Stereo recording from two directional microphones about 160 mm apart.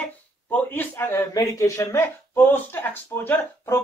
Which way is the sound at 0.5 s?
10° left (ahead or behind).